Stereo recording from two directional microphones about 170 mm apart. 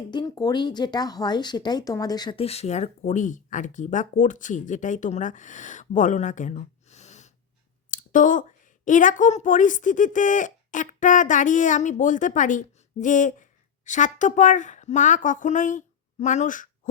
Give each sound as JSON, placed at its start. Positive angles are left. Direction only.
{"t": 0.1, "sound": "a woman's voice", "side_deg": 25}